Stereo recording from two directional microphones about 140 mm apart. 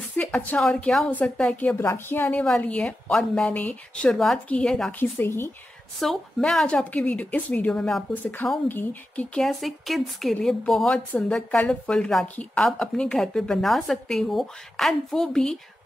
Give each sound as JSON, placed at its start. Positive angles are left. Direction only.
{"t": 0.2, "sound": "a woman's voice", "side_deg": 10}
{"t": 4.9, "sound": "speech", "side_deg": 15}
{"t": 5.9, "sound": "a woman's voice", "side_deg": 0}